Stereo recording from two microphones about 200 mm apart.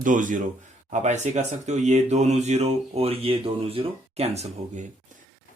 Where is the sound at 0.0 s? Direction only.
40° right (ahead or behind).